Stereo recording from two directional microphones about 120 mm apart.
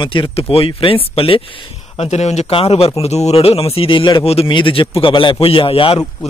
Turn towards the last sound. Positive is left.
turn(degrees=50)  # may be behind; listen again after turning